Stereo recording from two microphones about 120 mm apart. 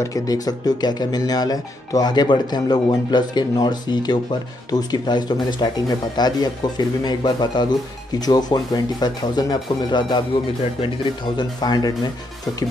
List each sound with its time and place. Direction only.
0.0 s speech: 30° left (ahead or behind)
11.3 s speech: 35° left (ahead or behind)